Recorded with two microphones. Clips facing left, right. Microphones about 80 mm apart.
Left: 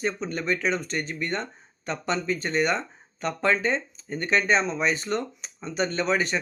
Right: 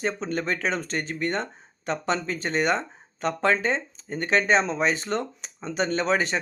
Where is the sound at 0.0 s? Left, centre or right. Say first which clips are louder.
Right 1 dB; right.